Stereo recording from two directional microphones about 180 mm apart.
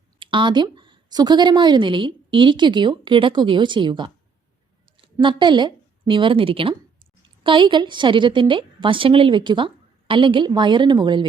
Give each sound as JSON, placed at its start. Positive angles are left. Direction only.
{"t": 0.2, "sound": "a woman's voice", "side_deg": -25}